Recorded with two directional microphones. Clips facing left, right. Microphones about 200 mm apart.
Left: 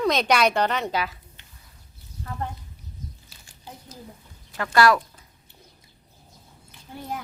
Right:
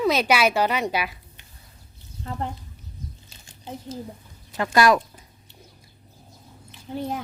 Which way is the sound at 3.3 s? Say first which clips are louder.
Right 7 dB; 20° right (ahead or behind).